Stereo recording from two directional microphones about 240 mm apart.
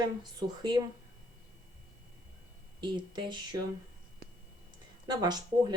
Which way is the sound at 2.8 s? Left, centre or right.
Centre.